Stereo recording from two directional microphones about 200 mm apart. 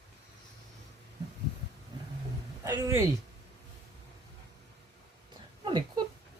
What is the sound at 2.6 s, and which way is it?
Speech, 15° right (ahead or behind).